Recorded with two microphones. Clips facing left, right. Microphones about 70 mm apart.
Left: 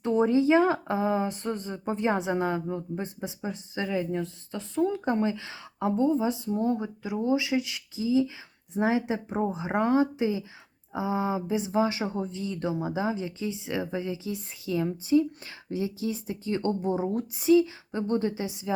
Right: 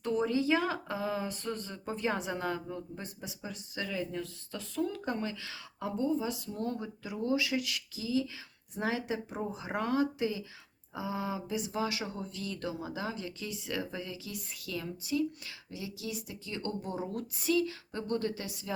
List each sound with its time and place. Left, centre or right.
0.0 s speech: left